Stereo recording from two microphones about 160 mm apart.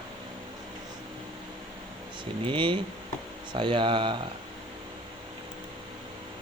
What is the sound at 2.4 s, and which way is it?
Speech, 30° right (ahead or behind).